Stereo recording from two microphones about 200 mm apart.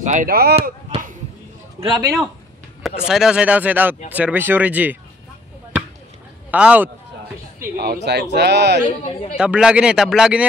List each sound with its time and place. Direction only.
0.0 s speech: 40° right (ahead or behind)
1.8 s a man's voice: 20° right (ahead or behind)
3.1 s speech: 5° right (ahead or behind)
6.5 s speech: 5° right (ahead or behind)
7.7 s speech: 50° right (ahead or behind)
8.8 s speech: 30° left (ahead or behind)
9.4 s speech: 5° right (ahead or behind)